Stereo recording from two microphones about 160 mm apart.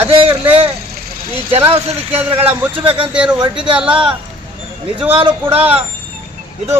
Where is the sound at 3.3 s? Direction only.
30° right (ahead or behind).